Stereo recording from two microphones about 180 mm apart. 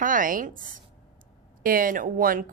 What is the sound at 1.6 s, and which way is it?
Speech, 50° right (ahead or behind).